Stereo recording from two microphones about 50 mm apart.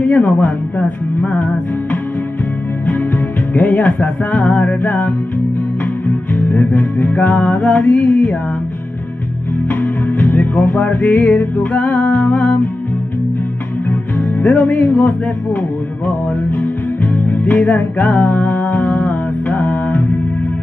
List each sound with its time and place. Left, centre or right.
0.0 s music: left
9.7 s music: left
14.4 s music: left